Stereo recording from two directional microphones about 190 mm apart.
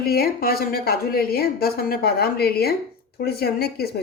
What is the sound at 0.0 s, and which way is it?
Speech, 55° left (ahead or behind).